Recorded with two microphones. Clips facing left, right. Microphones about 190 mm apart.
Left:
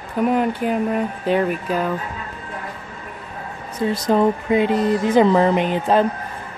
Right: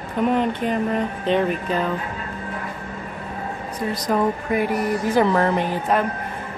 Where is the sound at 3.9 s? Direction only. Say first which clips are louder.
Left 4 dB; 25° left (ahead or behind).